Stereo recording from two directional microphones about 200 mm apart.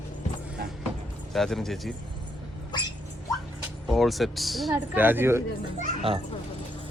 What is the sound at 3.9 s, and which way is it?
Speech, centre (ahead or behind).